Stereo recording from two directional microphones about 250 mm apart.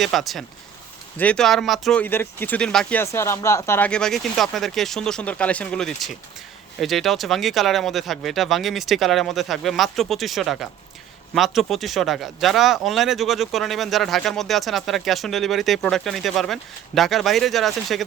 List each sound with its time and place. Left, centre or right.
0.0 s speech: centre